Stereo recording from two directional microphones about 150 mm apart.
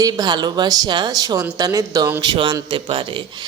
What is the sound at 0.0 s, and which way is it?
Speech, 30° right (ahead or behind).